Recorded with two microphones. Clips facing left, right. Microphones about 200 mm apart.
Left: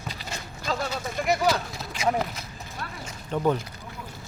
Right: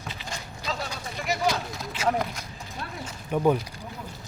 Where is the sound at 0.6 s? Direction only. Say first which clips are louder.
Left 5 dB; 50° left (ahead or behind).